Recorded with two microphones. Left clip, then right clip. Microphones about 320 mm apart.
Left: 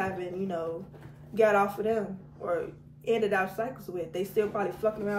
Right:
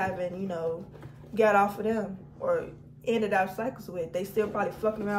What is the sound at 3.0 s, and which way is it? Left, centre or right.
Speech, centre.